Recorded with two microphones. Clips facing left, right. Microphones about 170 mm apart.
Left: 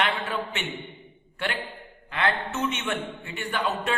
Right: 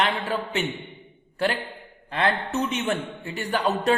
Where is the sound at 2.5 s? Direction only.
35° right (ahead or behind).